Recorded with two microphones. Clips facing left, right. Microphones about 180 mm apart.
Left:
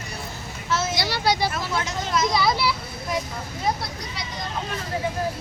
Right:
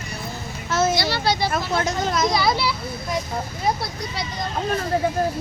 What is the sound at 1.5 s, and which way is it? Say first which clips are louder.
Speech: right 4 dB; 40° right (ahead or behind).